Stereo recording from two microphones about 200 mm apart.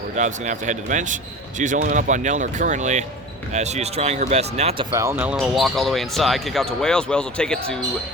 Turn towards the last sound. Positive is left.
turn(degrees=5)  # may be behind; listen again after turning